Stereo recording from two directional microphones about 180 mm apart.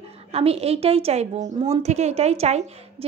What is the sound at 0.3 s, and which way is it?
A woman's voice, 35° right (ahead or behind).